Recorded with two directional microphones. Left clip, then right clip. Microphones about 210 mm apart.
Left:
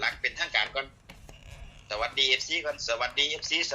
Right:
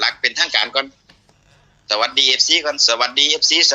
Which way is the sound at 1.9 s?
55° right (ahead or behind).